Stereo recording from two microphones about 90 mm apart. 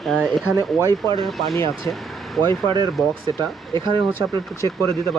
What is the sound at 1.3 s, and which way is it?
Speech, centre (ahead or behind).